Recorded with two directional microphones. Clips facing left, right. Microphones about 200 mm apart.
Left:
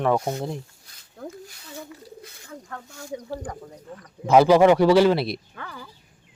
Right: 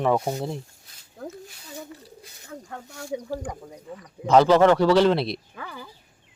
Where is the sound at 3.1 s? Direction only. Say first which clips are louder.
Right 2 dB; 10° right (ahead or behind).